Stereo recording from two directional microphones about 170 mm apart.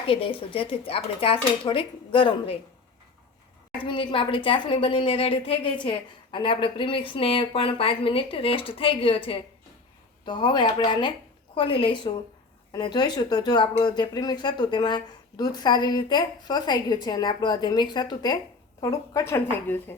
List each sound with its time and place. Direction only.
0.1 s a woman's voice: 30° left (ahead or behind)
3.8 s a woman's voice: 30° left (ahead or behind); by 19.8 s 15° left (ahead or behind)